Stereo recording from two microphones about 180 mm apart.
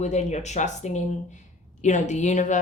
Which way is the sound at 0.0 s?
40° left (ahead or behind).